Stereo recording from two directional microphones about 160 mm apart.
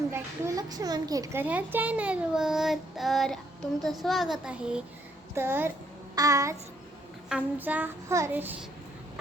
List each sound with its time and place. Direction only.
0.1 s a child's voice: 20° right (ahead or behind)
5.3 s child singing: 15° right (ahead or behind)
7.3 s child singing: 10° right (ahead or behind)